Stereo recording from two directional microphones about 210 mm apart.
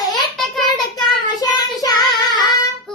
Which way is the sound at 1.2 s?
20° left (ahead or behind).